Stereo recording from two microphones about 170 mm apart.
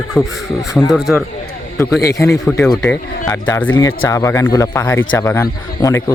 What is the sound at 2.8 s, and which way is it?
Speech, 10° left (ahead or behind).